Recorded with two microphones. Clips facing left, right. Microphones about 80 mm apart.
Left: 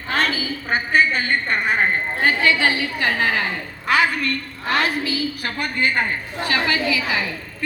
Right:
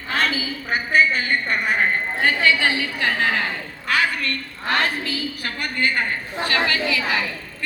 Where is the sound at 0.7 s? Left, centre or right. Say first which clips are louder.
Even; left.